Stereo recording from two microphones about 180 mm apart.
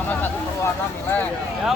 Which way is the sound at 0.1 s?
10° left (ahead or behind).